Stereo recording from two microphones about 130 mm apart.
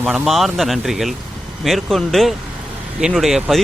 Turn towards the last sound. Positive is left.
turn(degrees=-5)  # may be behind; listen again after turning